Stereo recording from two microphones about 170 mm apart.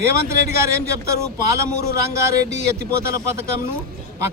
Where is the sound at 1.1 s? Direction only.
15° right (ahead or behind).